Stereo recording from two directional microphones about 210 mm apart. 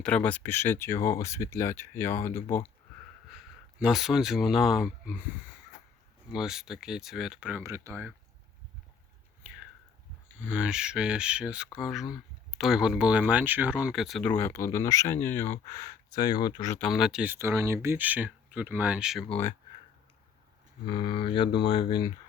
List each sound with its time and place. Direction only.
0.0 s speech: 5° left (ahead or behind)
3.2 s speech: centre (ahead or behind)
6.3 s speech: centre (ahead or behind)
9.4 s whispering: 5° right (ahead or behind)
10.4 s speech: 5° right (ahead or behind); by 16.7 s 20° left (ahead or behind)
16.7 s speech: centre (ahead or behind)
20.8 s speech: 20° left (ahead or behind)